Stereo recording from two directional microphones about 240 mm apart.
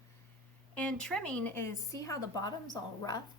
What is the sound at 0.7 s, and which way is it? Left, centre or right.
A woman's voice, centre.